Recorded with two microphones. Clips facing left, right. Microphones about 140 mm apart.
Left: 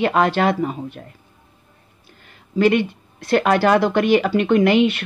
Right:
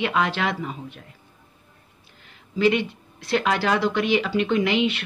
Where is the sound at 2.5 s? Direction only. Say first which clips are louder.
Left 4 dB; 50° left (ahead or behind).